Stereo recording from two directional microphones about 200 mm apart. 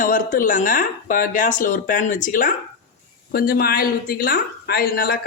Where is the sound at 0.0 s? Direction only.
40° left (ahead or behind).